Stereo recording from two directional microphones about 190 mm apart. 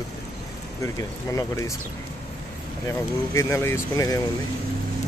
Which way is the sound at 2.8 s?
15° left (ahead or behind).